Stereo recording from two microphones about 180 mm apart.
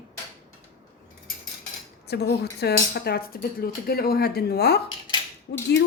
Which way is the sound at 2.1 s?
65° left (ahead or behind).